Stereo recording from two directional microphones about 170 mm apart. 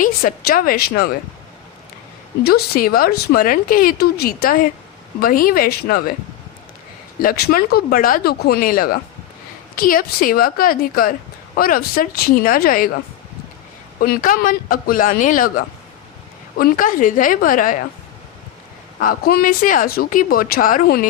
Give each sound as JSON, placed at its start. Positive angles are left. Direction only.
{"t": 0.0, "sound": "speech", "side_deg": 55}
{"t": 2.4, "sound": "speech", "side_deg": 60}
{"t": 7.2, "sound": "speech", "side_deg": 60}
{"t": 14.0, "sound": "a man's voice", "side_deg": 55}
{"t": 18.9, "sound": "speech", "side_deg": 60}